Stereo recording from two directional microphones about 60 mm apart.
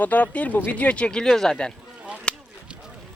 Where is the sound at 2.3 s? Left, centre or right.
Centre.